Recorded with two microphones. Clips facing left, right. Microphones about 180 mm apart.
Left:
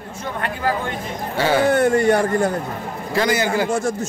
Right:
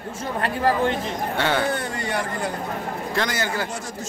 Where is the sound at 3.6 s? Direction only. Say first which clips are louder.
Left 11 dB; 50° left (ahead or behind).